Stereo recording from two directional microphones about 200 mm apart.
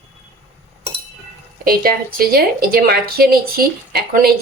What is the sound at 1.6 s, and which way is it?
Speech, 50° right (ahead or behind).